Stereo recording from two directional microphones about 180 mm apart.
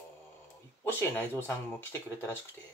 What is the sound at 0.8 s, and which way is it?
Speech, 10° left (ahead or behind).